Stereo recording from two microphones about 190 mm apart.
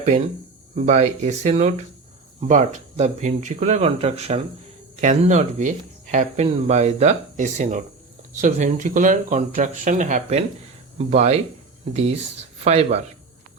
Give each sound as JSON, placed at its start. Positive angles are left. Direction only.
{"t": 0.8, "sound": "speech", "side_deg": -35}